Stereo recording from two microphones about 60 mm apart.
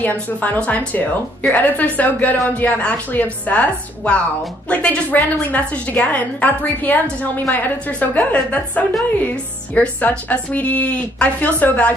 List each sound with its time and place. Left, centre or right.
0.0 s a woman's voice: left